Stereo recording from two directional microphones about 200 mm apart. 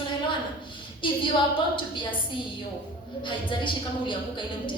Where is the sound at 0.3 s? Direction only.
25° left (ahead or behind).